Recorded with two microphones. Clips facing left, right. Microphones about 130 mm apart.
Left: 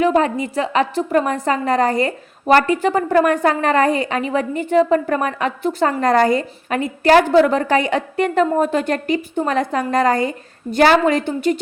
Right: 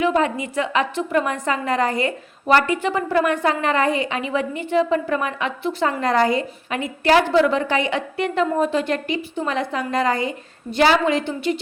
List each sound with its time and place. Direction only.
0.0 s a woman's voice: 40° left (ahead or behind)